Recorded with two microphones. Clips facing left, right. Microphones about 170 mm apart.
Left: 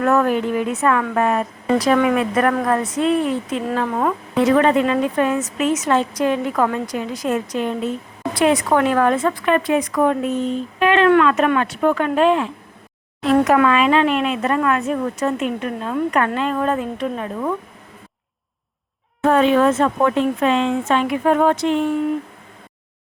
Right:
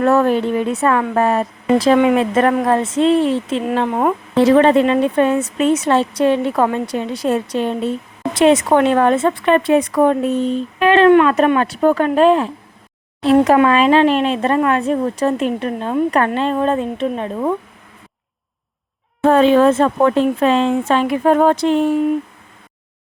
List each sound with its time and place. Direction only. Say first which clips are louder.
0.0 s a woman's voice: right 3 dB; 30° right (ahead or behind)
19.2 s speech: right 4 dB; 30° right (ahead or behind)